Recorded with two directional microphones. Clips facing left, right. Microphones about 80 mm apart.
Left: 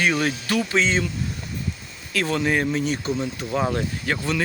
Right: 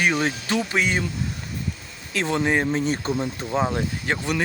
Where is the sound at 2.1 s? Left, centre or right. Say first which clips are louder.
Even; right.